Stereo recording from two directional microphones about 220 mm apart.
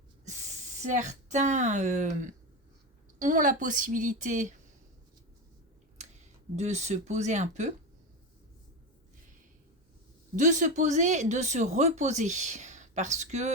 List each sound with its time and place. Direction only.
0.3 s speech: 30° right (ahead or behind)
6.6 s speech: 30° right (ahead or behind)
10.3 s speech: 35° right (ahead or behind)